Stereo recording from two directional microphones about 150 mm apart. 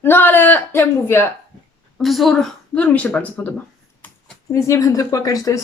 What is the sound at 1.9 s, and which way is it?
Speech, centre (ahead or behind).